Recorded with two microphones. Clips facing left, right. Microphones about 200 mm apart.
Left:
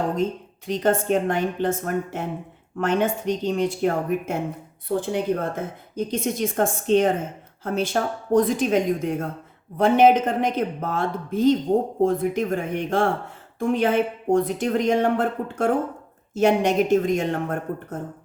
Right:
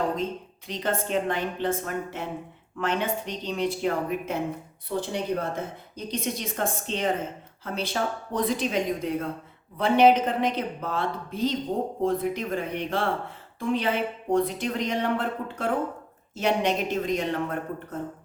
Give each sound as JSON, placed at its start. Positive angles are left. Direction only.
{"t": 0.7, "sound": "a woman's voice", "side_deg": 50}